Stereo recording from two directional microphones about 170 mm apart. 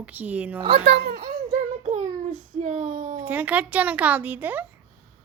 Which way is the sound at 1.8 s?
45° right (ahead or behind).